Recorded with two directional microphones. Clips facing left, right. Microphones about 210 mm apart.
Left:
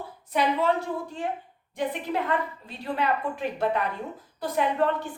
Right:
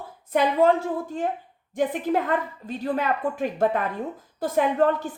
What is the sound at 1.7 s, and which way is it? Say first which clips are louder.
A woman's voice: right 5 dB; 45° right (ahead or behind).